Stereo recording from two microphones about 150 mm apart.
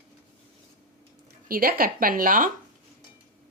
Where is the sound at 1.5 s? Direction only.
75° right (ahead or behind).